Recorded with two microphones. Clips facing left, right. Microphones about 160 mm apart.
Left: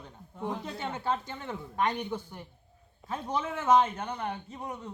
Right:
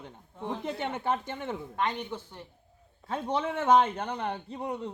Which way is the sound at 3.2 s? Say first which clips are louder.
Right 2 dB; 30° right (ahead or behind).